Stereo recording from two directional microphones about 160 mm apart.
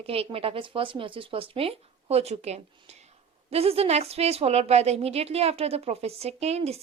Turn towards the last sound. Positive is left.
turn(degrees=-40)  # may be behind; listen again after turning